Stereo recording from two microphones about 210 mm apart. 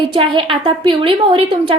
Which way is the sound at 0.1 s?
25° right (ahead or behind).